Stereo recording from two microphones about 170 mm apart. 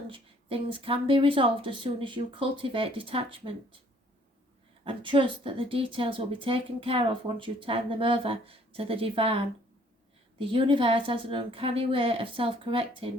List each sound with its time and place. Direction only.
0.1 s speech: 30° right (ahead or behind)
4.9 s speech: 30° right (ahead or behind)